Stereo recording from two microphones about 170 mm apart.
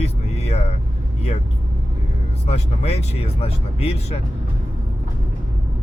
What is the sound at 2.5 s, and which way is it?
Speech, 40° left (ahead or behind).